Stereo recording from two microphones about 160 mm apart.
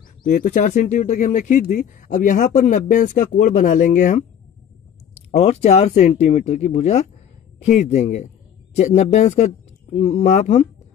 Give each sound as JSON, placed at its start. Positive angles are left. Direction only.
{"t": 0.2, "sound": "speech", "side_deg": 55}
{"t": 5.1, "sound": "speech", "side_deg": 40}